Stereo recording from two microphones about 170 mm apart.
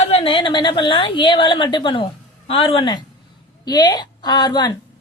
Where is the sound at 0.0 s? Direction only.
35° left (ahead or behind).